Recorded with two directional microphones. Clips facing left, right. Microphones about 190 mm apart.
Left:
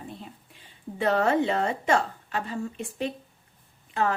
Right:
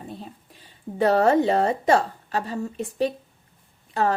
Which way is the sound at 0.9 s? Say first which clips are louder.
Right 5 dB; 40° right (ahead or behind).